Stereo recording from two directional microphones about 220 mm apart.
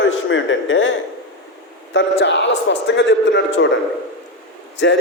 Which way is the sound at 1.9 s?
55° left (ahead or behind).